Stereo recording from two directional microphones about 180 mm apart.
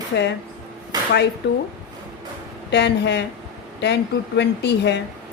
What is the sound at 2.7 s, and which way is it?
Speech, 70° left (ahead or behind).